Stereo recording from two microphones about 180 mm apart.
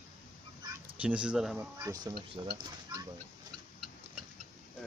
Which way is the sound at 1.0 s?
5° right (ahead or behind).